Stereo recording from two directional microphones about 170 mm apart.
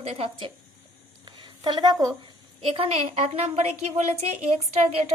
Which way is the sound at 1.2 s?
25° right (ahead or behind).